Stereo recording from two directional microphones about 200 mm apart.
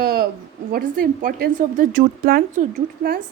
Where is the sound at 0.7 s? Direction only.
45° right (ahead or behind).